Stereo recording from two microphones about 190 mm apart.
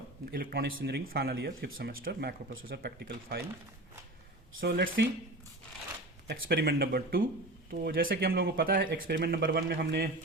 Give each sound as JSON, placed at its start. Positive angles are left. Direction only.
{"t": 0.3, "sound": "speech", "side_deg": -55}
{"t": 4.6, "sound": "speech", "side_deg": -55}
{"t": 6.2, "sound": "speech", "side_deg": -55}